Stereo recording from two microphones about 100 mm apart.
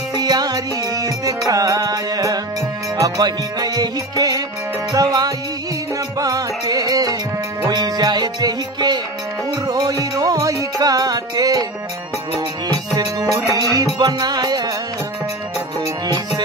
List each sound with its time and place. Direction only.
0.1 s music: 40° right (ahead or behind)